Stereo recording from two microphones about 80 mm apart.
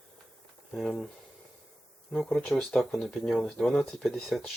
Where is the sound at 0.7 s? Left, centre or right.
Centre.